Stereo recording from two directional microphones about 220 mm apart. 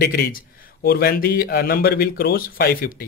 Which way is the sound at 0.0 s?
45° left (ahead or behind).